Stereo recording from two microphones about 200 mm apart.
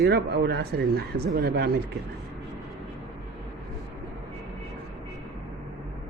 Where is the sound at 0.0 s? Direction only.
55° right (ahead or behind).